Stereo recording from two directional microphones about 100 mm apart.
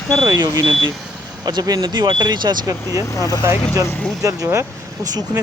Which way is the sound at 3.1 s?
35° left (ahead or behind).